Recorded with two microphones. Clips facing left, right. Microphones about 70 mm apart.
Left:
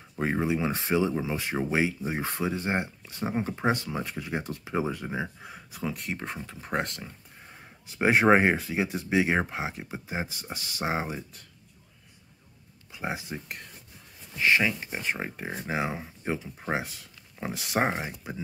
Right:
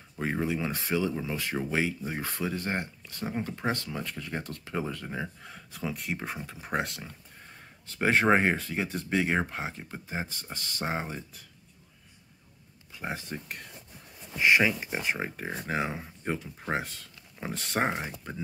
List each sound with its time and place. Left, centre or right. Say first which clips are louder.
0.1 s speech: left 3 dB; centre
7.4 s speech: left 2 dB; centre
12.9 s speech: left 2 dB; centre
14.4 s speech: right 1 dB; centre